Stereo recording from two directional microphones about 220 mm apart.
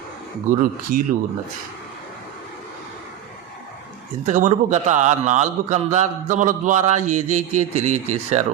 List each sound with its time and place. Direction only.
0.6 s a man's voice: 40° right (ahead or behind)
4.3 s a man's voice: 35° right (ahead or behind)